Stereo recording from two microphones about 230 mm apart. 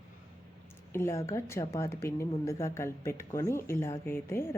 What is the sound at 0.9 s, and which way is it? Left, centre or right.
A woman's voice, centre.